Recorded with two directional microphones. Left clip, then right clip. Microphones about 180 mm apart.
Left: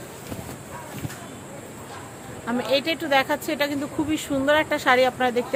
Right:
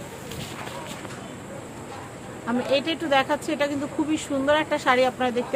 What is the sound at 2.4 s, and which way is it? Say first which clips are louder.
Speech: left 1 dB; 20° left (ahead or behind).